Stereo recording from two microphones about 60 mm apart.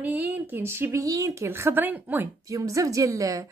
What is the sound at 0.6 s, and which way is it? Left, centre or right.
Speech, right.